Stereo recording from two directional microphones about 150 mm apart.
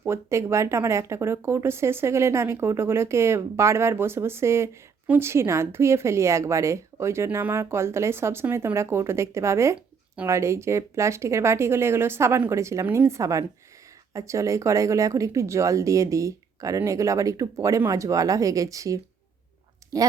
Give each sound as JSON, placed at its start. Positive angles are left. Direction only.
{"t": 0.0, "sound": "speech", "side_deg": -15}